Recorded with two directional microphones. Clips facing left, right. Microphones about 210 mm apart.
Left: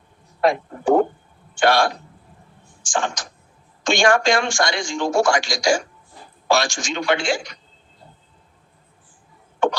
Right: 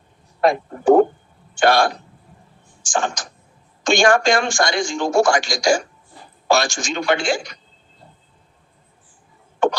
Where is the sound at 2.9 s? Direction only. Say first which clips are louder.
Right 2 dB; 45° right (ahead or behind).